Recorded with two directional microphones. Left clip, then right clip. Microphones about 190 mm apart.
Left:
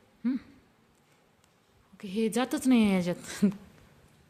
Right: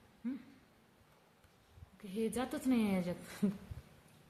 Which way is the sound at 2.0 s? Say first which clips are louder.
Left 9 dB; 55° left (ahead or behind).